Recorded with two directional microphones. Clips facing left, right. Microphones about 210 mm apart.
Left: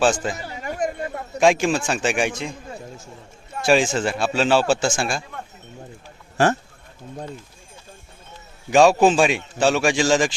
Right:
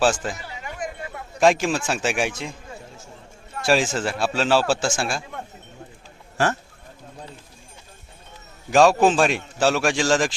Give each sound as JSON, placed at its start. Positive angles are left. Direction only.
{"t": 0.0, "sound": "a man's voice", "side_deg": 0}
{"t": 0.3, "sound": "a sound", "side_deg": 45}
{"t": 1.4, "sound": "a man's voice", "side_deg": 0}
{"t": 3.7, "sound": "a man's voice", "side_deg": 0}
{"t": 6.3, "sound": "speech", "side_deg": 25}
{"t": 8.7, "sound": "a man's voice", "side_deg": 0}